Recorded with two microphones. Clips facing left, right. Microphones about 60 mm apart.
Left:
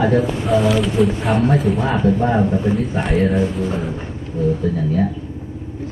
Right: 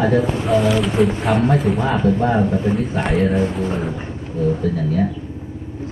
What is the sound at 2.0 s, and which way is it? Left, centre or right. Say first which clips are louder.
Speech: left 1 dB; centre.